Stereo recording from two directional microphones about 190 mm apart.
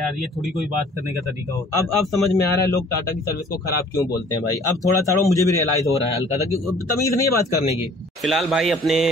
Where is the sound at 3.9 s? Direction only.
20° left (ahead or behind).